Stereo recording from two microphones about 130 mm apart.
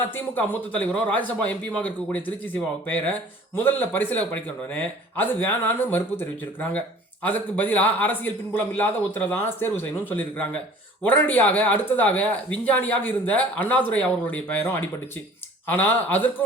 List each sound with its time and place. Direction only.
0.3 s speech: 15° left (ahead or behind)